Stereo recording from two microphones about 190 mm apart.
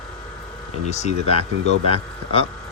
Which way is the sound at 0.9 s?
35° left (ahead or behind).